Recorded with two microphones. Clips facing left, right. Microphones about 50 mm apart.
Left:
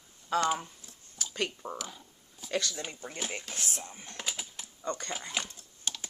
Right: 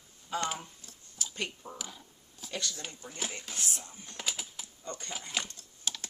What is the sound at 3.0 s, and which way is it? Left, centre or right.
Speech, left.